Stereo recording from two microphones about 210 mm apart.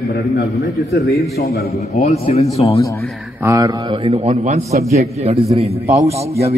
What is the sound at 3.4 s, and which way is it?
Speech, 15° right (ahead or behind).